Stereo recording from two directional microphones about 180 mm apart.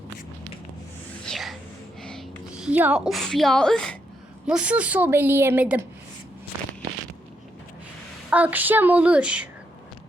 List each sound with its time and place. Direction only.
1.2 s whispering: centre (ahead or behind)
2.0 s a woman's voice: 5° left (ahead or behind)
8.3 s a woman's voice: 10° right (ahead or behind)